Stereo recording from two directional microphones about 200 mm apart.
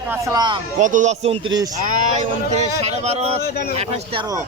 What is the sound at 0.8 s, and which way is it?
Speech, 40° right (ahead or behind).